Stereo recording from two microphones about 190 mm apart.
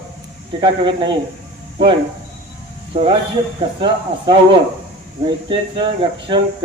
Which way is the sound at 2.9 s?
30° right (ahead or behind).